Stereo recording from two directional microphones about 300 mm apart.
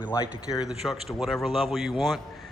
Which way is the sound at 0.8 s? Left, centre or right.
Centre.